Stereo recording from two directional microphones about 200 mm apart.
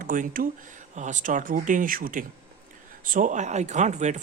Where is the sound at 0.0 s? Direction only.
45° right (ahead or behind).